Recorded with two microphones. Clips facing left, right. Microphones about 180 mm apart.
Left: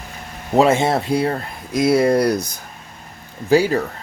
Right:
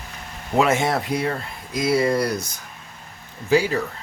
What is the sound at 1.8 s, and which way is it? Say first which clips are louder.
Speech: left 5 dB; 60° left (ahead or behind).